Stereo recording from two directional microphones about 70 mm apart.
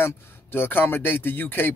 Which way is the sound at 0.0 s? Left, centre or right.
Left.